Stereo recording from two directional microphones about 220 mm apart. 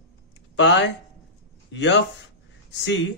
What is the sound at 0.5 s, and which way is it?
Speech, 55° left (ahead or behind).